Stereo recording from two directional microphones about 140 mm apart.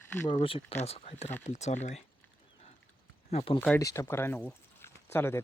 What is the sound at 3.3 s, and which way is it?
Speech, 50° left (ahead or behind).